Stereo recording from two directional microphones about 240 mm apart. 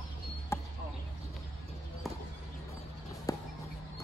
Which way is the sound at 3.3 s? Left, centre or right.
Centre.